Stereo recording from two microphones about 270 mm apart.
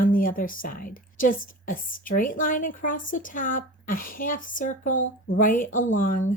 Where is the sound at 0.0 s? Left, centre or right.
Left.